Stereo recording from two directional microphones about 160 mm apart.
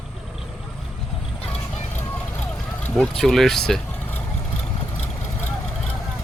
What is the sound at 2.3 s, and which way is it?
Vehicle, 5° left (ahead or behind).